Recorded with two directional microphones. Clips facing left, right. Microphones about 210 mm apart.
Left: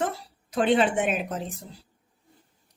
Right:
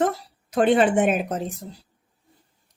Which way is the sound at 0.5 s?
50° right (ahead or behind).